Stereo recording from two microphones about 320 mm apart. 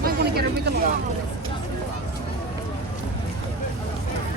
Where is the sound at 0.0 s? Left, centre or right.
Right.